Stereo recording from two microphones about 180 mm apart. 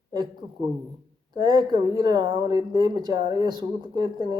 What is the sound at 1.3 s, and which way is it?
Speech, 25° right (ahead or behind).